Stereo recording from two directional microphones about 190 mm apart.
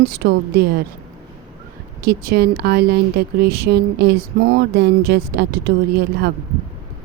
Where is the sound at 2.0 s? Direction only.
55° right (ahead or behind).